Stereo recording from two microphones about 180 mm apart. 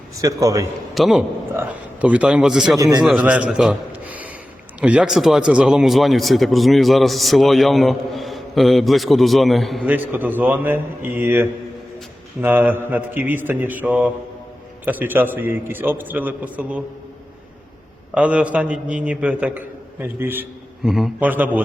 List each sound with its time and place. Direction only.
0.2 s a man's voice: 20° right (ahead or behind)
0.9 s a man's voice: centre (ahead or behind)
2.7 s a man's voice: 20° right (ahead or behind)
3.0 s a man's voice: 5° right (ahead or behind)
9.8 s a man's voice: 10° right (ahead or behind)
18.1 s a man's voice: 5° right (ahead or behind)
20.8 s a man's voice: centre (ahead or behind)